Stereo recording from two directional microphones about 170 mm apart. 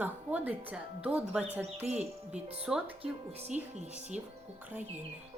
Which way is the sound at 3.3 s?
35° right (ahead or behind).